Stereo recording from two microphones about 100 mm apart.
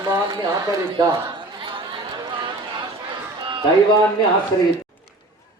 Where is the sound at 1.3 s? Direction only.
60° right (ahead or behind).